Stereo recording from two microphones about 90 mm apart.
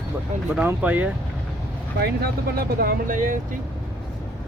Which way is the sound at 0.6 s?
20° right (ahead or behind).